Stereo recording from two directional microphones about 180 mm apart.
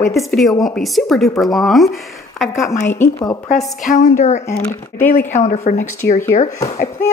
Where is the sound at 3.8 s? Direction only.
45° left (ahead or behind).